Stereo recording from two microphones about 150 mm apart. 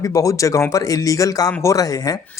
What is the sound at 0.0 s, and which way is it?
Speech, 20° left (ahead or behind).